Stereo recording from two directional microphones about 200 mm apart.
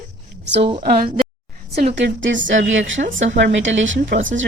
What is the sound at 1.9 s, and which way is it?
Speech, 65° right (ahead or behind).